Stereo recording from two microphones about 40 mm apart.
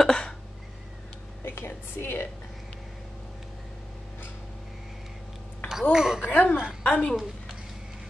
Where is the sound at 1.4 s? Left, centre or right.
Left.